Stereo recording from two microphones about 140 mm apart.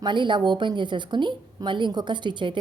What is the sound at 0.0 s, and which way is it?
A woman's voice, 35° right (ahead or behind).